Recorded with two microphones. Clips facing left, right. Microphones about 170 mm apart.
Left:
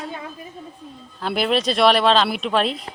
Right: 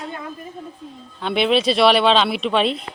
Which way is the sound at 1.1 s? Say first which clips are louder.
Right 3 dB; centre (ahead or behind).